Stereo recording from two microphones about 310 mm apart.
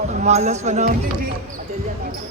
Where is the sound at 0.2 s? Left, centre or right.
Right.